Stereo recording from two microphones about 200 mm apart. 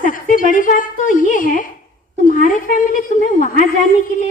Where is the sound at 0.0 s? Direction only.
45° left (ahead or behind).